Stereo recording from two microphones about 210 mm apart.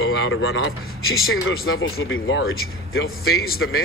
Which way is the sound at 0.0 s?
60° left (ahead or behind).